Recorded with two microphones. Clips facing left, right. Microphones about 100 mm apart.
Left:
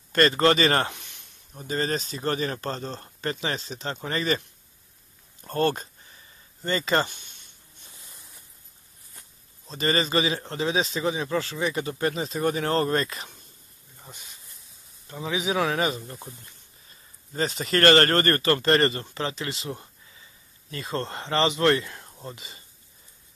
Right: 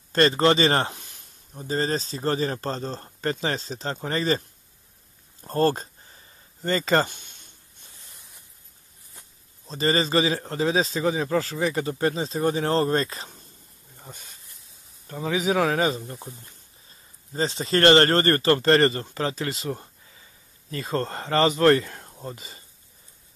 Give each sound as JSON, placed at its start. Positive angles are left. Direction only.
{"t": 0.1, "sound": "a man's voice", "side_deg": -30}
{"t": 5.4, "sound": "a sound", "side_deg": -35}
{"t": 9.7, "sound": "a man's voice", "side_deg": -30}
{"t": 15.2, "sound": "a man's voice", "side_deg": -40}
{"t": 17.3, "sound": "a man's voice", "side_deg": -30}